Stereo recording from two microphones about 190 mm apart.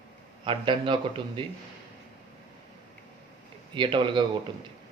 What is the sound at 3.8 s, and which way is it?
Speech, 25° right (ahead or behind).